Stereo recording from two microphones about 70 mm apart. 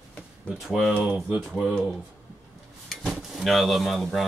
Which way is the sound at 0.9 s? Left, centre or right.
Centre.